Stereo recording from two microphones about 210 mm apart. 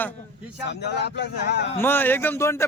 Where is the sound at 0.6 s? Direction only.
55° left (ahead or behind).